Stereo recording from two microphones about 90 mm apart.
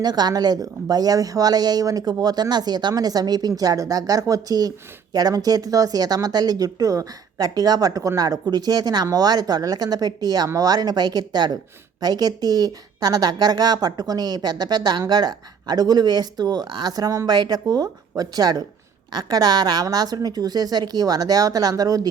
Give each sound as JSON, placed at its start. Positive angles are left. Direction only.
{"t": 0.0, "sound": "a woman's voice", "side_deg": -50}